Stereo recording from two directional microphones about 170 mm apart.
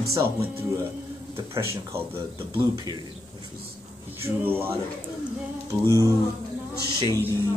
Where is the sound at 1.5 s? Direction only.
15° right (ahead or behind).